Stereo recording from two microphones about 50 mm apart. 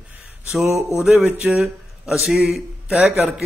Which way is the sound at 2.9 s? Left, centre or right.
Right.